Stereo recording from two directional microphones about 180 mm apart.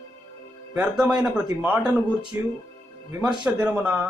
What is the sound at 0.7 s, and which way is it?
Speech, 5° right (ahead or behind).